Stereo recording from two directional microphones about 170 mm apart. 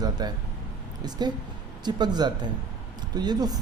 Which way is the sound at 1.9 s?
25° right (ahead or behind).